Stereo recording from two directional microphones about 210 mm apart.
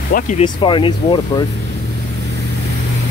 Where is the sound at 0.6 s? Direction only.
25° left (ahead or behind).